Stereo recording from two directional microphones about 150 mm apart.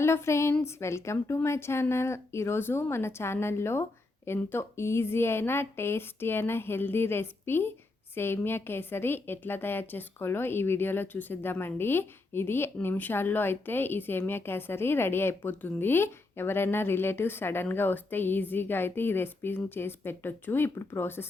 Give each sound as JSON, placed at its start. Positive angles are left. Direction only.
{"t": 0.0, "sound": "a woman's voice", "side_deg": 20}